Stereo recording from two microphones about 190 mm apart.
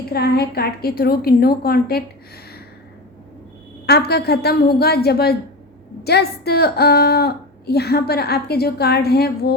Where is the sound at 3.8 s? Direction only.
60° left (ahead or behind).